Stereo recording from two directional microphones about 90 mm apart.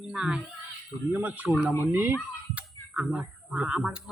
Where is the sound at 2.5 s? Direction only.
15° right (ahead or behind).